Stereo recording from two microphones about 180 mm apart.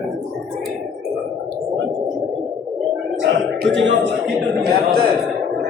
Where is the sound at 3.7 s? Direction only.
85° right.